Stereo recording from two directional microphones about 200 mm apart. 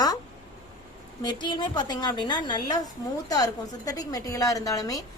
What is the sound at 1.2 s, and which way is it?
A woman's voice, 25° left (ahead or behind).